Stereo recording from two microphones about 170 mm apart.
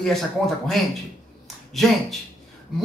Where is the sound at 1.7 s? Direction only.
Centre (ahead or behind).